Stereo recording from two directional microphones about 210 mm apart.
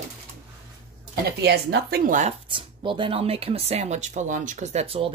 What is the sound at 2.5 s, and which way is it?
Speech, 25° right (ahead or behind).